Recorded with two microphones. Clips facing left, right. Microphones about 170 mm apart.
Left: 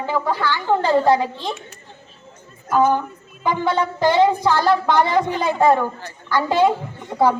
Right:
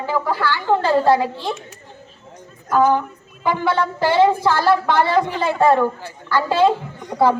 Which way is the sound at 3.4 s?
15° left (ahead or behind).